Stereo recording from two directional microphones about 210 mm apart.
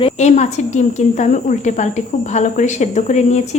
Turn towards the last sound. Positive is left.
turn(degrees=35)  # may be behind; listen again after turning